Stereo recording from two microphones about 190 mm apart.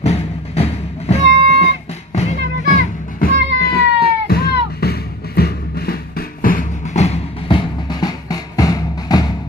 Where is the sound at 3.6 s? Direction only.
50° left (ahead or behind).